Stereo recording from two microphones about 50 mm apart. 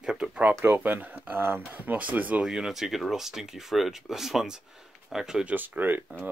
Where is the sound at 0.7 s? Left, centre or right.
Right.